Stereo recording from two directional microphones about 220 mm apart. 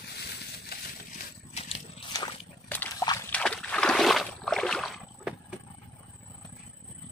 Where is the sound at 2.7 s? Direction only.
5° left (ahead or behind).